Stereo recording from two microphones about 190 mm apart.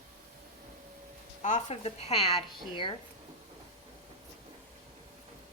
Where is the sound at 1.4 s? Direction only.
35° left (ahead or behind).